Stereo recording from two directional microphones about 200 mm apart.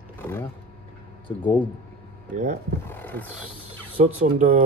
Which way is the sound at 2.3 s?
35° right (ahead or behind).